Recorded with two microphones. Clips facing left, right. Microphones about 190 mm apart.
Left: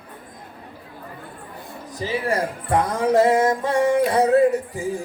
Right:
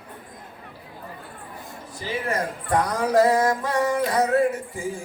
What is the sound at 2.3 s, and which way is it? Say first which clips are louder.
Speech: left 1 dB; 30° left (ahead or behind).